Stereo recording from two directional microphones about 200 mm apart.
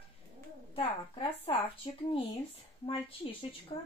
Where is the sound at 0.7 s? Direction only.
30° left (ahead or behind).